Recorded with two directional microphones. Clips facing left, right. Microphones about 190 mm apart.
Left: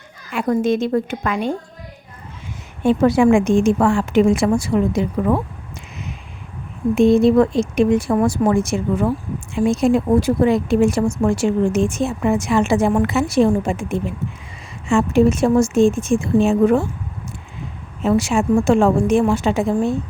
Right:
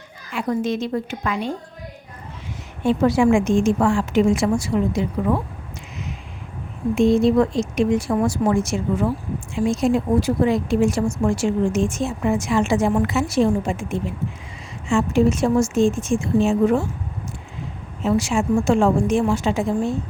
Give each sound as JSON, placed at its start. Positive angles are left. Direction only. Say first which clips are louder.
{"t": 0.3, "sound": "a woman's voice", "louder": "left 5 dB", "side_deg": 50}
{"t": 2.8, "sound": "speech", "louder": "left 3 dB", "side_deg": 55}
{"t": 6.9, "sound": "speech", "louder": "left 3 dB", "side_deg": 55}
{"t": 18.0, "sound": "speech", "louder": "left 3 dB", "side_deg": 60}